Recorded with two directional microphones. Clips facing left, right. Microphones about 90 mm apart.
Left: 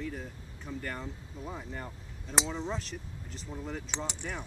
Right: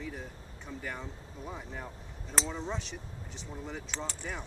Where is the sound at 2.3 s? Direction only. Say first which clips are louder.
Left 2 dB; 15° left (ahead or behind).